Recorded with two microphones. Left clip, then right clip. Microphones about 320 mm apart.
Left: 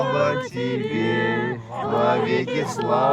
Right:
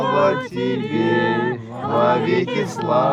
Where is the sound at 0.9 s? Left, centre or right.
Left.